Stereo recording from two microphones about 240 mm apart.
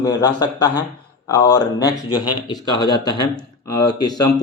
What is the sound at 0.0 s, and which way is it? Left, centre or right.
Speech, centre.